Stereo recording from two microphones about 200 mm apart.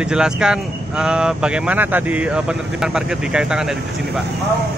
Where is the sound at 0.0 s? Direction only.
5° right (ahead or behind).